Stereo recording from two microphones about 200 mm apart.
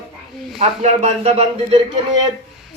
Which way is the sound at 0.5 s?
35° right (ahead or behind).